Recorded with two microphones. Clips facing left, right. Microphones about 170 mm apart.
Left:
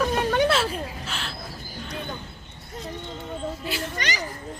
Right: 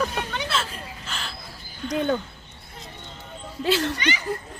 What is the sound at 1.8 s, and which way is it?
Speech, 90° right.